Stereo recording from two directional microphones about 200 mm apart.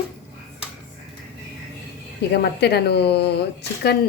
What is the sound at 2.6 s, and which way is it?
Speech, 55° left (ahead or behind).